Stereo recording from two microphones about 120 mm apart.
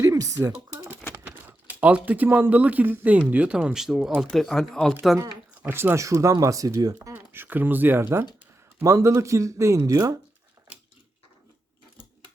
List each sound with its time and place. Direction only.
0.0 s typing: 25° right (ahead or behind)
1.2 s speech: 15° right (ahead or behind); by 4.9 s 5° left (ahead or behind)
5.6 s speech: 20° right (ahead or behind)
7.1 s speech: 15° right (ahead or behind)